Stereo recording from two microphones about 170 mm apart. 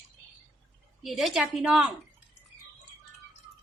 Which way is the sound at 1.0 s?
Centre (ahead or behind).